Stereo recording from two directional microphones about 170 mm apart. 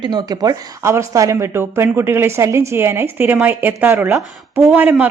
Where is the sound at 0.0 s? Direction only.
25° right (ahead or behind).